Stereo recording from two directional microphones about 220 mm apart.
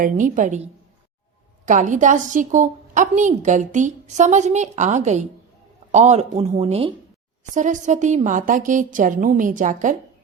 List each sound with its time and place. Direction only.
0.0 s a woman's voice: 35° right (ahead or behind)